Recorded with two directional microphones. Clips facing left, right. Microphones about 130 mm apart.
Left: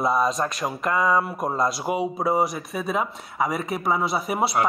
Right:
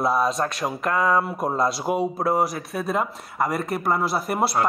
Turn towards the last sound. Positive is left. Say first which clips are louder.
# even
turn(degrees=0)  # may be behind; listen again after turning